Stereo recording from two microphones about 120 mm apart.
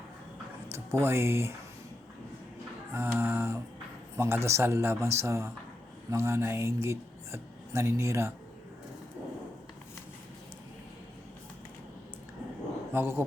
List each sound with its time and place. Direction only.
0.7 s speech: 20° right (ahead or behind)
2.9 s speech: 20° right (ahead or behind)
12.9 s speech: 20° right (ahead or behind)